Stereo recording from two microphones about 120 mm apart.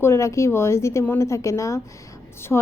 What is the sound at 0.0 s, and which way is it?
Speech, 25° left (ahead or behind).